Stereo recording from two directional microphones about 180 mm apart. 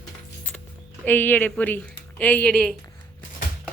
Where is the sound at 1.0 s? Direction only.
10° left (ahead or behind).